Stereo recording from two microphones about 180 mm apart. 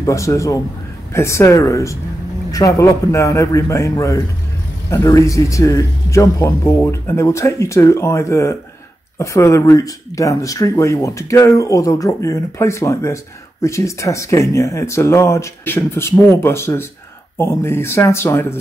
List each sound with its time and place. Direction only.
0.0 s speech: 15° left (ahead or behind)